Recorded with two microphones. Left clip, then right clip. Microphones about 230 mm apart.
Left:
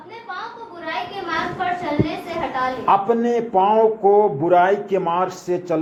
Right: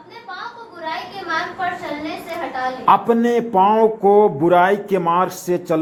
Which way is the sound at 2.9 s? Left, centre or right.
Right.